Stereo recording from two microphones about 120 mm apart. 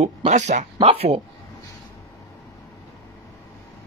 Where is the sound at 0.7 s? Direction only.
50° right (ahead or behind).